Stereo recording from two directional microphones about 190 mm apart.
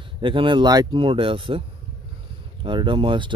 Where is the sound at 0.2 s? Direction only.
25° right (ahead or behind).